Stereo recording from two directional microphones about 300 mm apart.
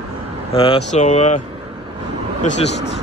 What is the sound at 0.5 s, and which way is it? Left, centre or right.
Speech, centre.